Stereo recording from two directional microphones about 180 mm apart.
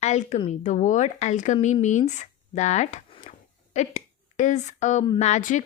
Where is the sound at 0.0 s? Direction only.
40° left (ahead or behind).